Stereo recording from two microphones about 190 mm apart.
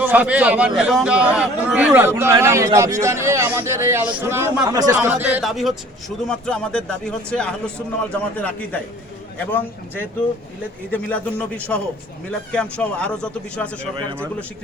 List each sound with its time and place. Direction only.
0.0 s a man's voice: 10° right (ahead or behind)
4.9 s speech: 10° right (ahead or behind)